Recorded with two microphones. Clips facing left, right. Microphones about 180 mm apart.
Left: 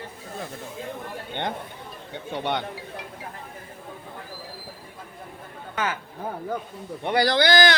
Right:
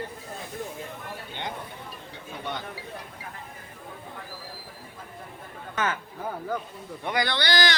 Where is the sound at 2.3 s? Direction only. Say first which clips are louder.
Left 7 dB; 75° left (ahead or behind).